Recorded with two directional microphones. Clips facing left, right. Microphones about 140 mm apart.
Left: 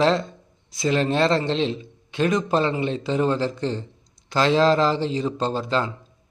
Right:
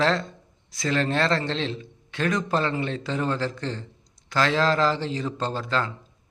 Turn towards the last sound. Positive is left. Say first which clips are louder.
# left 3 dB
turn(degrees=20)  # may be behind; listen again after turning